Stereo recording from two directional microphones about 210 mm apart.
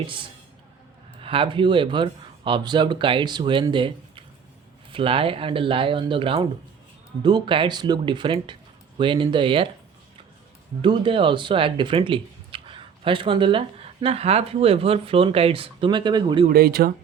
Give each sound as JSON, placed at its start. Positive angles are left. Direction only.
{"t": 1.2, "sound": "speech", "side_deg": -25}
{"t": 10.8, "sound": "speech", "side_deg": -25}
{"t": 16.5, "sound": "speech", "side_deg": -45}